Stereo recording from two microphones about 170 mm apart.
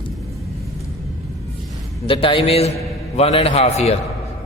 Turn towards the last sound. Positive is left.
turn(degrees=40)  # may be behind; listen again after turning